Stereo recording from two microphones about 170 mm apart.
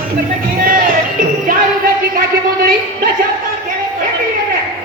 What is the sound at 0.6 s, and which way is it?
Music, 55° right (ahead or behind).